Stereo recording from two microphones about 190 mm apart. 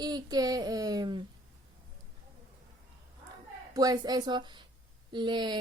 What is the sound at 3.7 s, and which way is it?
Speech, 20° right (ahead or behind).